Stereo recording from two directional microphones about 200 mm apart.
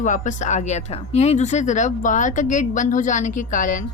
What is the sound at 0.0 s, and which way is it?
Speech, 40° left (ahead or behind).